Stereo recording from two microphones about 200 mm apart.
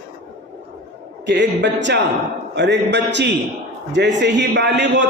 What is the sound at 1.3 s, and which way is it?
A man's voice, 60° right (ahead or behind).